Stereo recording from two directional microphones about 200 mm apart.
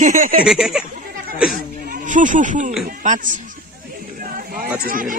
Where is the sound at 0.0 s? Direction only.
40° right (ahead or behind).